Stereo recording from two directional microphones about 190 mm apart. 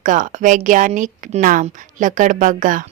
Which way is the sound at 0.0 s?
40° right (ahead or behind).